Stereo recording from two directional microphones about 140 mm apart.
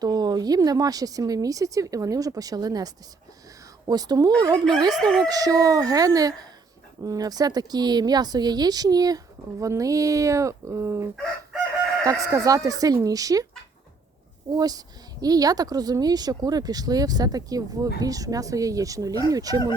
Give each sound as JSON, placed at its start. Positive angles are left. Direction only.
{"t": 0.0, "sound": "speech", "side_deg": -30}
{"t": 4.5, "sound": "speech", "side_deg": 5}
{"t": 5.2, "sound": "speech", "side_deg": -25}
{"t": 12.2, "sound": "speech", "side_deg": -25}
{"t": 14.5, "sound": "speech", "side_deg": -25}